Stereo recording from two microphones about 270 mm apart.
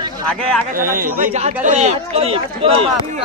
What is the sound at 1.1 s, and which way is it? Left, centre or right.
Speech, right.